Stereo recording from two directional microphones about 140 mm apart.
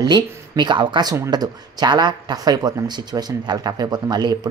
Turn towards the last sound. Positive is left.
turn(degrees=-30)  # may be behind; listen again after turning